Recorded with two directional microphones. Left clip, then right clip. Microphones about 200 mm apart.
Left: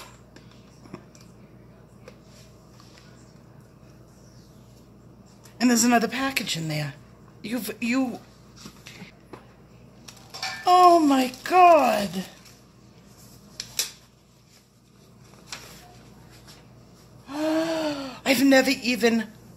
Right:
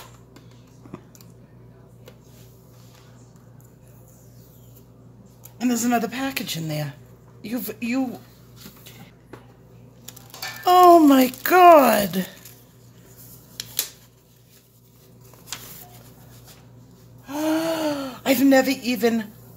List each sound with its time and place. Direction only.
5.6 s speech: 20° left (ahead or behind)
5.9 s speech: centre (ahead or behind)
10.6 s speech: 30° right (ahead or behind)
17.3 s gasp: 45° right (ahead or behind)
18.2 s speech: 10° right (ahead or behind)